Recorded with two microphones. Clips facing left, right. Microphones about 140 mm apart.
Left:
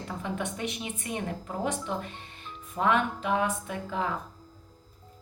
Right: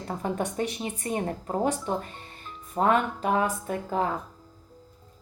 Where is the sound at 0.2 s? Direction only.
40° right (ahead or behind).